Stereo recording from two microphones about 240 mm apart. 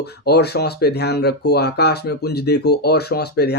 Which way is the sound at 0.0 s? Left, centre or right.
Left.